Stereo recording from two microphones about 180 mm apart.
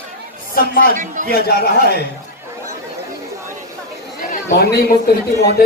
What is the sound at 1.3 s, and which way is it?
Speech, 60° left (ahead or behind).